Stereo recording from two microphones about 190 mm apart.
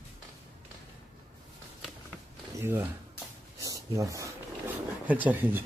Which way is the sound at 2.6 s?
10° right (ahead or behind).